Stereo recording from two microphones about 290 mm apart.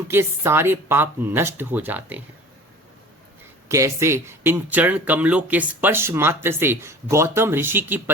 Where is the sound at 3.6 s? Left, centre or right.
Centre.